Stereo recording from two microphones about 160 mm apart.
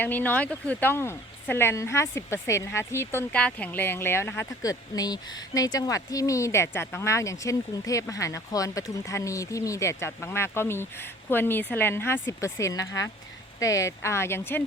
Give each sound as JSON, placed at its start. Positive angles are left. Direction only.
{"t": 0.0, "sound": "speech", "side_deg": 10}